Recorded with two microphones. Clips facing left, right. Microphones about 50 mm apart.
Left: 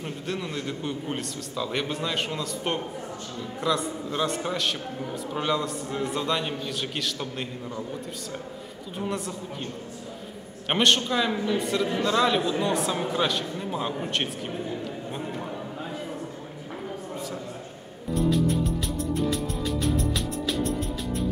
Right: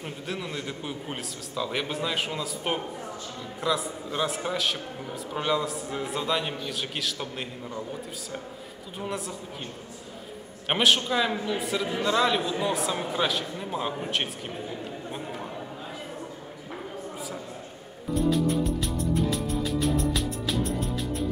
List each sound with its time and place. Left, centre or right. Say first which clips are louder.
0.0 s a man's voice: left 2 dB; centre
8.9 s a man's voice: left 2 dB; centre
10.7 s a man's voice: left 1 dB; centre
15.1 s a sound: left 3 dB; centre
18.1 s music: even; centre